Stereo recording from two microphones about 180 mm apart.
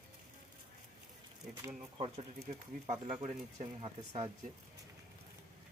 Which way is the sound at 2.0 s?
35° right (ahead or behind).